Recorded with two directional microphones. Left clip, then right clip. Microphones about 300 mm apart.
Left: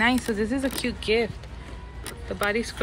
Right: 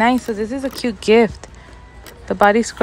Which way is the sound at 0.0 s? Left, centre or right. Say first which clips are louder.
Right 6 dB; centre.